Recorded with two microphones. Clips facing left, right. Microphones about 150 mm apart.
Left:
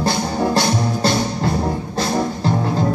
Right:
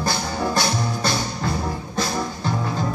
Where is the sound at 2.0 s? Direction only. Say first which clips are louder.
Left 5 dB; 35° left (ahead or behind).